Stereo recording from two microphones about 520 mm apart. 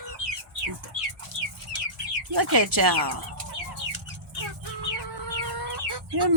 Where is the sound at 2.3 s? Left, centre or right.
Right.